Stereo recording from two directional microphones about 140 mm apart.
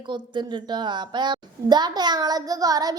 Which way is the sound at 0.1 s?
35° right (ahead or behind).